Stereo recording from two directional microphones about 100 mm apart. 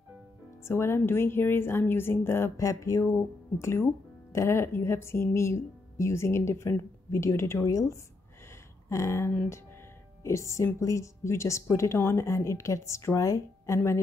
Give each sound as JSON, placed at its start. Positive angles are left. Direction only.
{"t": 0.7, "sound": "a woman's voice", "side_deg": 25}